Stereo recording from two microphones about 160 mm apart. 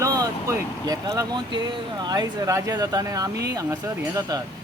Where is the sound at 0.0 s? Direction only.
20° right (ahead or behind).